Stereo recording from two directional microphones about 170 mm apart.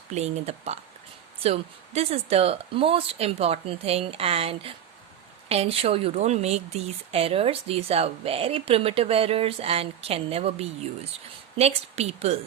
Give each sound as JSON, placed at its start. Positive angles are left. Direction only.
{"t": 0.1, "sound": "speech", "side_deg": -40}